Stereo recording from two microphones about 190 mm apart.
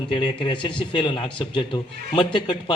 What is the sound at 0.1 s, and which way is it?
A man's voice, 25° left (ahead or behind).